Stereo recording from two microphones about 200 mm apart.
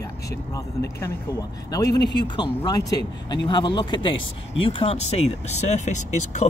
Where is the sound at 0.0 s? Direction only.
15° left (ahead or behind).